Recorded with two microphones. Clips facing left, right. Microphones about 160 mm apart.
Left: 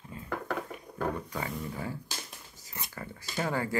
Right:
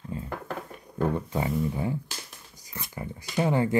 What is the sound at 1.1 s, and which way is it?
Speech, 25° right (ahead or behind).